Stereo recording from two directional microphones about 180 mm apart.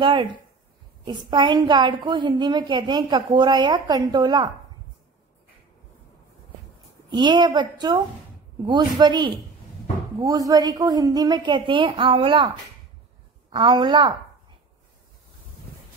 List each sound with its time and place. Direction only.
0.0 s a woman's voice: 25° right (ahead or behind)
7.1 s a woman's voice: 25° right (ahead or behind)
13.5 s a woman's voice: 25° right (ahead or behind)